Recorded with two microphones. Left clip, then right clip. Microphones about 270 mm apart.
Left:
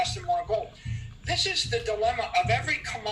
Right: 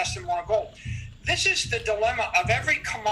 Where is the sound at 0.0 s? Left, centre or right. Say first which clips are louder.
Even; right.